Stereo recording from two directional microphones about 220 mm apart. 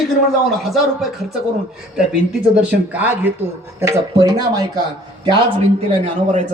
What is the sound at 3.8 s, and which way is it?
Speech, 15° right (ahead or behind).